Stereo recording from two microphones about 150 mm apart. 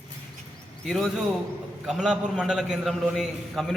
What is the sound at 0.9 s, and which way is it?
A man's voice, centre (ahead or behind).